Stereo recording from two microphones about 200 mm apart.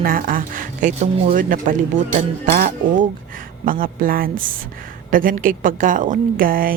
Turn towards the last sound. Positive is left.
turn(degrees=-45)  # may be behind; listen again after turning